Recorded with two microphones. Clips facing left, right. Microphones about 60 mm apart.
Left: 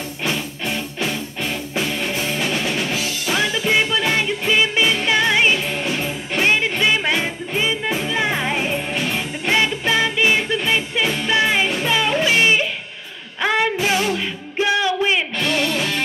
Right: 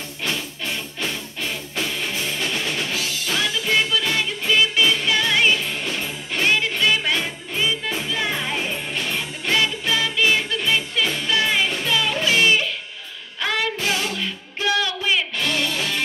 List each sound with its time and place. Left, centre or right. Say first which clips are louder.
0.2 s music: left 3 dB; centre
8.9 s music: left 3 dB; centre
9.6 s music: left 4 dB; left
15.5 s music: left 5 dB; centre